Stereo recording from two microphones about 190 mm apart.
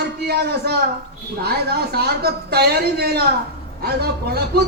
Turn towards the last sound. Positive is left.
turn(degrees=-55)  # may be behind; listen again after turning